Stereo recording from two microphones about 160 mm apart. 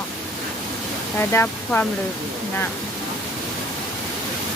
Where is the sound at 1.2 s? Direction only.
15° left (ahead or behind).